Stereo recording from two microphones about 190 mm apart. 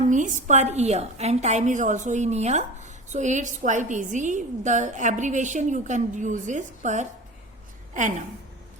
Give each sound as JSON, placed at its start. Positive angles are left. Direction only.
{"t": 0.1, "sound": "a woman's voice", "side_deg": -40}